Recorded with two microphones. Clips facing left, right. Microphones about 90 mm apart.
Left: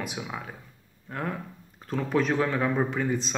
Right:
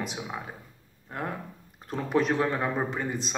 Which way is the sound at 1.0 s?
15° right (ahead or behind).